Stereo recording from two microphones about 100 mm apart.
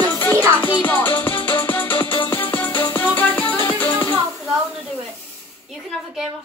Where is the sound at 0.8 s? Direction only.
20° left (ahead or behind).